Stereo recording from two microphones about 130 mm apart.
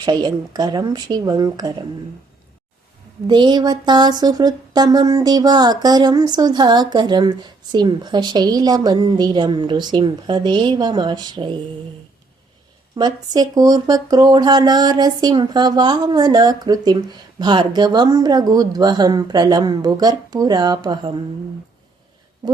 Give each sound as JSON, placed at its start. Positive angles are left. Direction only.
{"t": 0.0, "sound": "speech", "side_deg": -35}
{"t": 3.2, "sound": "speech", "side_deg": -35}
{"t": 13.0, "sound": "speech", "side_deg": -30}